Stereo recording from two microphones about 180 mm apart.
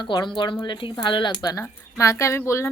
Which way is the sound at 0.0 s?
25° left (ahead or behind).